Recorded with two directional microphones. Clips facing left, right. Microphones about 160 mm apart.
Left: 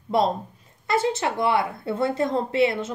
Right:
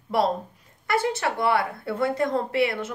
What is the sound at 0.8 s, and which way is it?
A woman's voice, 20° left (ahead or behind).